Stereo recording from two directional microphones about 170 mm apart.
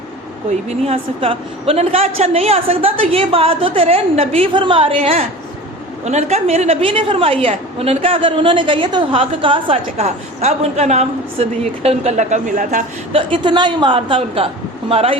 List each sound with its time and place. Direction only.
0.9 s a woman's voice: 35° right (ahead or behind)
13.1 s a woman's voice: 30° right (ahead or behind)